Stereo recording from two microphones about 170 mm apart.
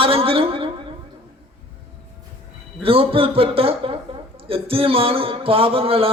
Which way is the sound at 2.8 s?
35° right (ahead or behind).